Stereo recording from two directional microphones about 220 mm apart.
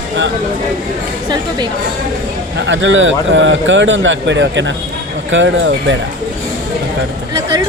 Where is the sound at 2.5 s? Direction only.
55° right (ahead or behind).